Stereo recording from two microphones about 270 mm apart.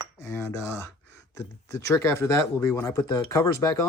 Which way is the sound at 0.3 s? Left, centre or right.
Centre.